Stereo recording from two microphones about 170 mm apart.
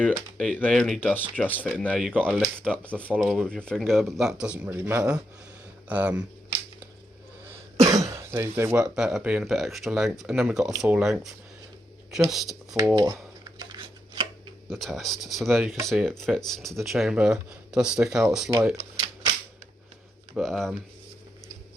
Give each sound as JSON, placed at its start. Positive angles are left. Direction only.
{"t": 0.3, "sound": "speech", "side_deg": 5}
{"t": 2.0, "sound": "speech", "side_deg": -5}
{"t": 2.6, "sound": "speech", "side_deg": 5}
{"t": 2.9, "sound": "speech", "side_deg": -10}
{"t": 7.8, "sound": "speech", "side_deg": -20}
{"t": 13.6, "sound": "a sound", "side_deg": -25}
{"t": 14.7, "sound": "speech", "side_deg": 0}
{"t": 20.3, "sound": "speech", "side_deg": 0}